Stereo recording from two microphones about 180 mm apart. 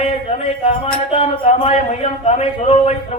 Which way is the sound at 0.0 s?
30° left (ahead or behind).